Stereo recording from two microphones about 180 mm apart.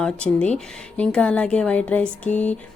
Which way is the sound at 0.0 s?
5° left (ahead or behind).